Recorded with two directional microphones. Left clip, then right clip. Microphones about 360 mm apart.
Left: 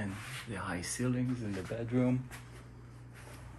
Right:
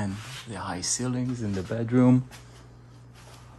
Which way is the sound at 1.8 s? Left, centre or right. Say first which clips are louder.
Right 10 dB; right.